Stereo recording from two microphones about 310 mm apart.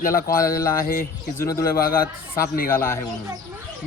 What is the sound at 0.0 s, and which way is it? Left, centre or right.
A man's voice, left.